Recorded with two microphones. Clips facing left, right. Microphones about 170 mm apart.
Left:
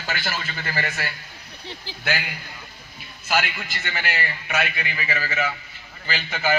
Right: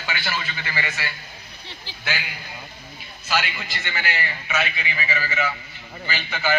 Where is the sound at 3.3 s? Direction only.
50° left (ahead or behind).